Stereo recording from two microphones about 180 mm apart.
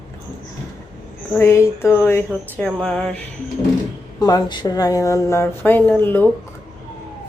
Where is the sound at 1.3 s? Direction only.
15° left (ahead or behind).